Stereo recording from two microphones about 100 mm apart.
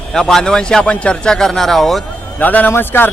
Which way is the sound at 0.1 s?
5° left (ahead or behind).